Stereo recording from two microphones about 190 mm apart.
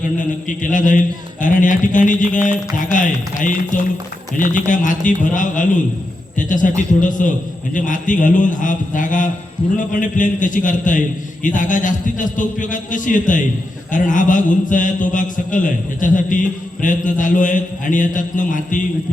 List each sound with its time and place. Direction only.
0.2 s mantra: 45° left (ahead or behind)